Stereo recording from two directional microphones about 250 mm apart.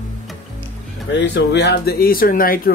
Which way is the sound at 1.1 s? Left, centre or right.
Left.